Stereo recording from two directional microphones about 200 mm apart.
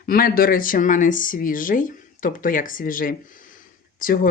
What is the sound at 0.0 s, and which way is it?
Speech, 45° left (ahead or behind).